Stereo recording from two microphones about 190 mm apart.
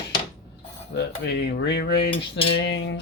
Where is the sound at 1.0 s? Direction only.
65° left (ahead or behind).